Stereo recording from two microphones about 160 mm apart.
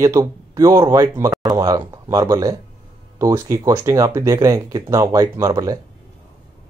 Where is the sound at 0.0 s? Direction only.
20° right (ahead or behind).